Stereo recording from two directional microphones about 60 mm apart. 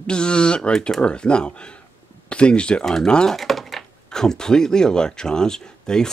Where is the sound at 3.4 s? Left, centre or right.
Centre.